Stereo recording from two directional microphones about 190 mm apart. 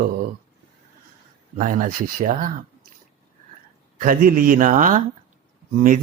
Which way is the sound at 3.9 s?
45° right (ahead or behind).